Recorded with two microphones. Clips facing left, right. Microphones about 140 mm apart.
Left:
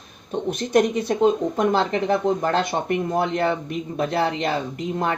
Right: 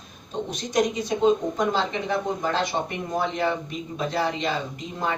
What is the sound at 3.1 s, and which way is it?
Speech, 55° left (ahead or behind).